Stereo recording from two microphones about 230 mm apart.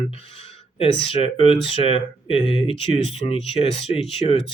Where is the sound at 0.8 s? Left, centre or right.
Left.